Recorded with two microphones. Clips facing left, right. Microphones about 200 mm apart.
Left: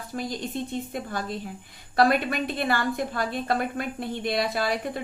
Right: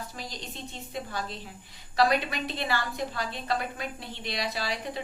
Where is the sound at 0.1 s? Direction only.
50° left (ahead or behind).